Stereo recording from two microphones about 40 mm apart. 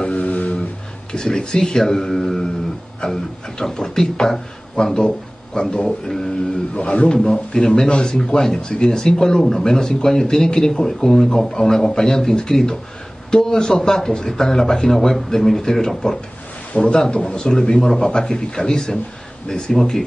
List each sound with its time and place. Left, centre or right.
0.2 s a sound: left
1.1 s speech: centre
16.7 s speech: centre